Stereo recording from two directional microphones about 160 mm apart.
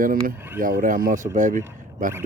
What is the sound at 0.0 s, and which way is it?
Speech, 60° right (ahead or behind).